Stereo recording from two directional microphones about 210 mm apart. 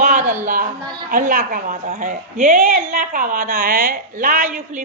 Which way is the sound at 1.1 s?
40° right (ahead or behind).